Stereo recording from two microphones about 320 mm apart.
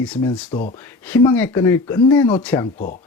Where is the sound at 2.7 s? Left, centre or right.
Left.